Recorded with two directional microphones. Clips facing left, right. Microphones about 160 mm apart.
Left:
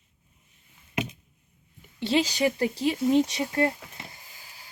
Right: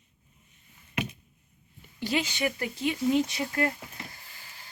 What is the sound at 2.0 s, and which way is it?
Speech, 30° left (ahead or behind).